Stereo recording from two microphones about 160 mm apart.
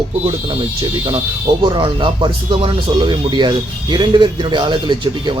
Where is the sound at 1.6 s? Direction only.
30° right (ahead or behind).